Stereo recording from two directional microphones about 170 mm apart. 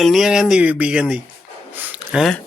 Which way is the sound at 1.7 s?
10° right (ahead or behind).